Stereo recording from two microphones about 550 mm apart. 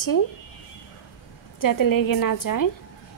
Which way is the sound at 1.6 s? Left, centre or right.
Left.